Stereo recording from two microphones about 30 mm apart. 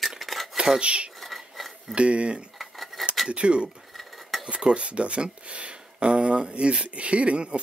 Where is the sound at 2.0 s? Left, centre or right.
Right.